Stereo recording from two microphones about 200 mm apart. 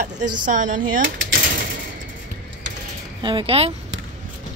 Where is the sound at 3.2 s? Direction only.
25° right (ahead or behind).